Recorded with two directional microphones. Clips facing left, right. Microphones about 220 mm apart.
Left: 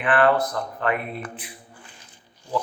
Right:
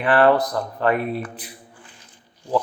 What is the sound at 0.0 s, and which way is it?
A man's voice, 35° right (ahead or behind).